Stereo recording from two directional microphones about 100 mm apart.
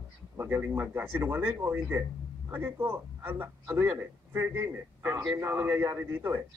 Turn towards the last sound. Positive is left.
turn(degrees=-20)  # may be behind; listen again after turning